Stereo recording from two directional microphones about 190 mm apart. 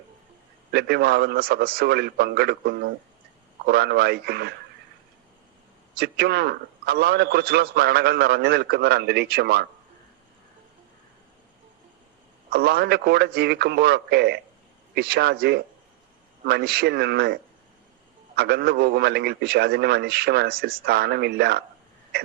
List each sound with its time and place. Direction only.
0.7 s a man's voice: 60° right (ahead or behind)
6.0 s a man's voice: 60° right (ahead or behind)
12.5 s a man's voice: 55° right (ahead or behind)
18.3 s a man's voice: 55° right (ahead or behind)